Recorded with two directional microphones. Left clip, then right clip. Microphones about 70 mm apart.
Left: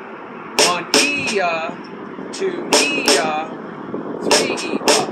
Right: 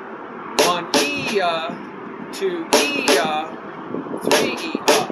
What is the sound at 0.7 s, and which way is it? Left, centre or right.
Music, right.